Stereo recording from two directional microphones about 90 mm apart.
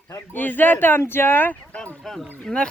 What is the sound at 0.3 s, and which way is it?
Speech, 20° left (ahead or behind).